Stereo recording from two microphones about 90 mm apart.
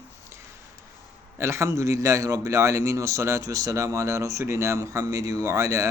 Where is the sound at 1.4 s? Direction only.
30° right (ahead or behind).